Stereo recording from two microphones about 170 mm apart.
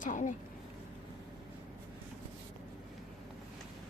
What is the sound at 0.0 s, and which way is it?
Speech, 50° left (ahead or behind).